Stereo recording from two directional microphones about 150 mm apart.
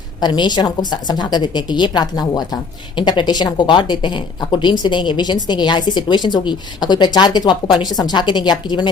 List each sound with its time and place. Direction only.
0.2 s speech: 30° left (ahead or behind)